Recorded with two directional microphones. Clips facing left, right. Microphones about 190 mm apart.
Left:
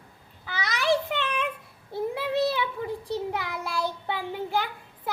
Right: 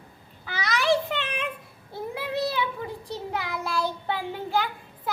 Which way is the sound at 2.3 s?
25° left (ahead or behind).